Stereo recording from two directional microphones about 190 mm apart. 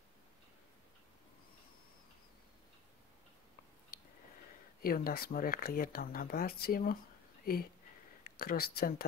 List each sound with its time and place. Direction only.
4.8 s speech: 50° left (ahead or behind)
8.2 s speech: 50° left (ahead or behind)